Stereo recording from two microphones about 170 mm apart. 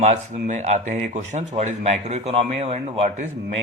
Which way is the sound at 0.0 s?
45° right (ahead or behind).